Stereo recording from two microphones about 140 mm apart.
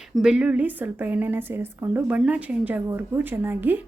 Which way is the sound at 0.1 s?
5° right (ahead or behind).